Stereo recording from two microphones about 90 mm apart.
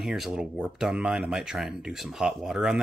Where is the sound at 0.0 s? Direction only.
5° right (ahead or behind).